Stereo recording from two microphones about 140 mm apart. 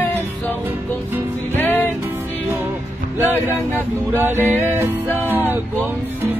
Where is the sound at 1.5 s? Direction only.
15° left (ahead or behind).